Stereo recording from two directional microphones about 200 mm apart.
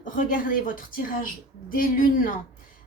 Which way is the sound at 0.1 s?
45° left (ahead or behind).